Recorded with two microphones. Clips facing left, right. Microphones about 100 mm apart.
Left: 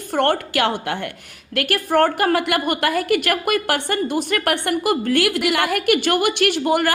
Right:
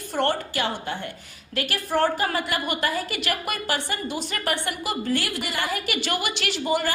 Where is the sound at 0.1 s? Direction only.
60° left (ahead or behind); by 1.1 s 75° left (ahead or behind).